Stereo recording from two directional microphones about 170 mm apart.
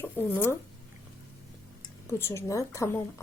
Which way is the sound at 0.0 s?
15° left (ahead or behind).